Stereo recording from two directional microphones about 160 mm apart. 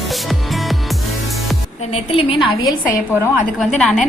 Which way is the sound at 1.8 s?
40° left (ahead or behind).